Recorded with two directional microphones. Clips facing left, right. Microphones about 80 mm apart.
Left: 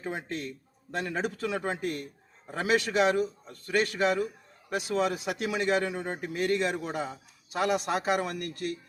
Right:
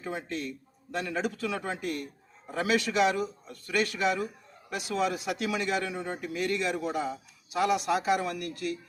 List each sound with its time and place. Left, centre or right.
0.0 s a man's voice: left